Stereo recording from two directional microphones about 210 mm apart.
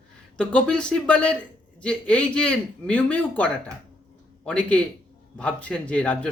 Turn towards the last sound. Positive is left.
turn(degrees=5)  # may be behind; listen again after turning